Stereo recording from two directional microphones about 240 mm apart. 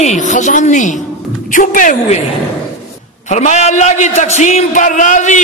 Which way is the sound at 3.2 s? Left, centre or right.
Left.